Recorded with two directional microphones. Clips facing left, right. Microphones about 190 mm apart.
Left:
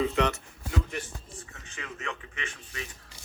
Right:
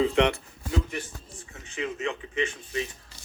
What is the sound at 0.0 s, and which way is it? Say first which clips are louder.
Speech: right 4 dB; 25° right (ahead or behind).